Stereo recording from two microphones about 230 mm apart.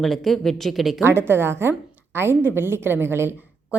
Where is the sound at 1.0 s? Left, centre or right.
Centre.